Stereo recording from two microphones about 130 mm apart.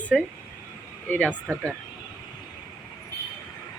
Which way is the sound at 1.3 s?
15° right (ahead or behind).